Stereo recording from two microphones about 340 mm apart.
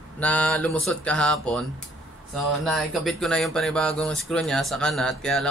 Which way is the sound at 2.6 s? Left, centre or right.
Centre.